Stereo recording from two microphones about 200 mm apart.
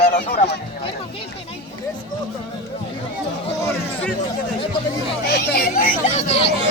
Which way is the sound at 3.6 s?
15° left (ahead or behind).